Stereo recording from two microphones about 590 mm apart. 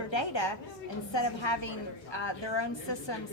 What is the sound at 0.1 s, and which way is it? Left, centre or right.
A woman's voice, left.